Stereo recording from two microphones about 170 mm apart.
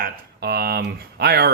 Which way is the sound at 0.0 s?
65° right (ahead or behind).